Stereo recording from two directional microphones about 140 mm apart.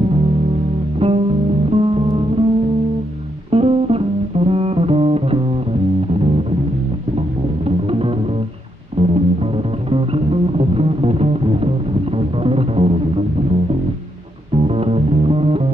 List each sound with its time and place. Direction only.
0.9 s music: 45° right (ahead or behind)
3.4 s music: 45° right (ahead or behind)
7.6 s music: 40° right (ahead or behind)
14.5 s music: 45° right (ahead or behind)